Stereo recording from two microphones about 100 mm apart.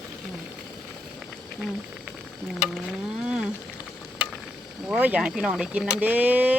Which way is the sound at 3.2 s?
5° right (ahead or behind).